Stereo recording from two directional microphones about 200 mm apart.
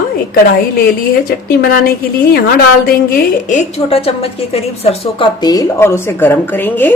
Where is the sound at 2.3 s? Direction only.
50° left (ahead or behind); by 6.9 s 10° left (ahead or behind).